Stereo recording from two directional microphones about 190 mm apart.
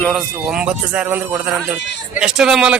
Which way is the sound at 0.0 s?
Centre (ahead or behind).